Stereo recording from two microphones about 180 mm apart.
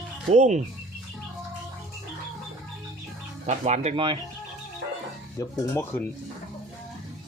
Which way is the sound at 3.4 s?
40° right (ahead or behind).